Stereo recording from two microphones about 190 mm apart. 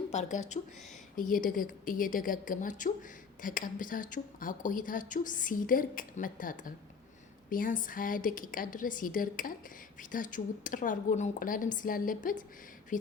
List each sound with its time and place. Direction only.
0.1 s a woman's voice: 35° left (ahead or behind)